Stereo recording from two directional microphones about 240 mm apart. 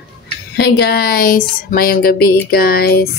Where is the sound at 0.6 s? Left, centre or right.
Left.